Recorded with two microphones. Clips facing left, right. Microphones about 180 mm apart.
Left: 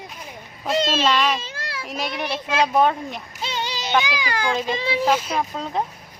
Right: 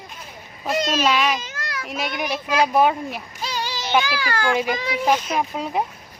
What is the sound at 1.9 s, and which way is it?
Speech, centre (ahead or behind).